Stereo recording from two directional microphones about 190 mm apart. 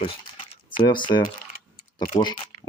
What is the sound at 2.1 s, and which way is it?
Speech, 25° left (ahead or behind).